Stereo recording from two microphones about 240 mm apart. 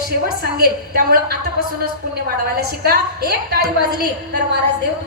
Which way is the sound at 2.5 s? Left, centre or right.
Right.